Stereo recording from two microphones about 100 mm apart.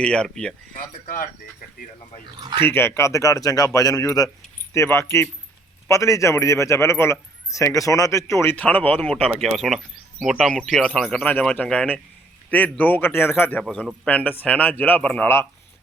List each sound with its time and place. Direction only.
0.0 s speech: 10° left (ahead or behind)
2.6 s a man's voice: 25° left (ahead or behind)
8.5 s speech: 15° left (ahead or behind)
9.4 s speech: centre (ahead or behind)
11.2 s a man's voice: 15° left (ahead or behind)
13.6 s speech: 10° left (ahead or behind)